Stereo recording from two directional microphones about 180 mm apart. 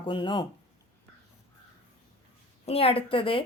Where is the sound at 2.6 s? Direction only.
35° left (ahead or behind).